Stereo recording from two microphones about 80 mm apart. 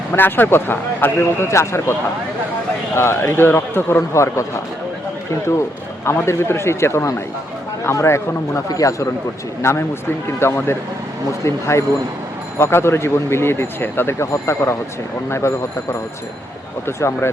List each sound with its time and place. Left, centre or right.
0.1 s a man's voice: left
4.1 s a man's voice: left
6.1 s a man's voice: left